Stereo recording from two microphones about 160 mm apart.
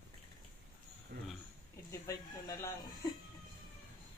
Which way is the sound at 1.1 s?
75° right (ahead or behind).